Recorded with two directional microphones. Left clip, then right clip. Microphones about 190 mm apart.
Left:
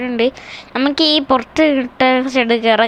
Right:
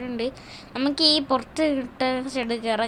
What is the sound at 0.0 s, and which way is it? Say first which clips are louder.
A woman's voice: left 12 dB; 25° left (ahead or behind).